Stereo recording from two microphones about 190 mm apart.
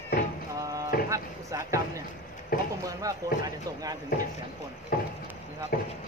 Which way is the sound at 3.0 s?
15° right (ahead or behind).